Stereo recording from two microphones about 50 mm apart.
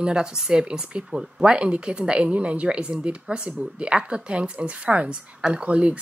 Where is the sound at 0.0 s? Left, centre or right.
Centre.